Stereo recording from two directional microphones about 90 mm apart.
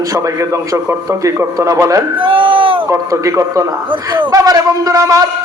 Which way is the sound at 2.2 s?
75° right (ahead or behind).